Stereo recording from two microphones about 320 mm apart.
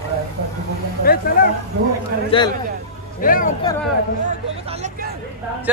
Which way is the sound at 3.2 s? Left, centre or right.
Left.